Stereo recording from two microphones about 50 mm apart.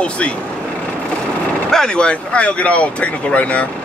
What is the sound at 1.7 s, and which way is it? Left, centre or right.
Speech, centre.